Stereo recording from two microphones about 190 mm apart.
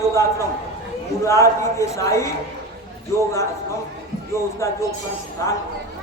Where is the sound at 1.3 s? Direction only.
15° left (ahead or behind).